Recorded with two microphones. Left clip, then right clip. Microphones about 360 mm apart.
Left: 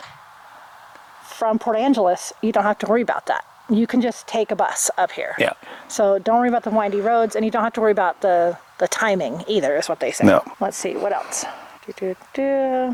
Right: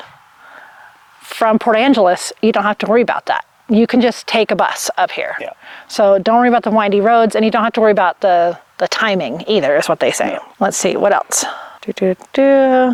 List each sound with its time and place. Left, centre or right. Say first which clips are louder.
1.3 s speech: right 7 dB; right
2.4 s speech: right 4 dB; right
4.1 s speech: right 7 dB; right